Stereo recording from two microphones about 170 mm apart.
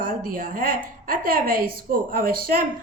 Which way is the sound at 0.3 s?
55° right (ahead or behind).